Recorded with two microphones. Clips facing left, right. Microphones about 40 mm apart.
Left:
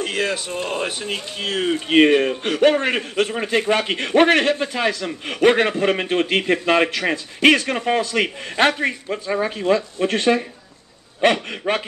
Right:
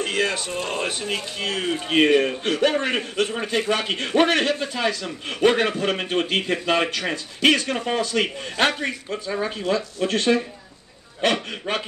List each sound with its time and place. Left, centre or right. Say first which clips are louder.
0.0 s a man's voice: left 1 dB; centre
9.9 s a man's voice: left 2 dB; left
11.7 s a man's voice: left 5 dB; left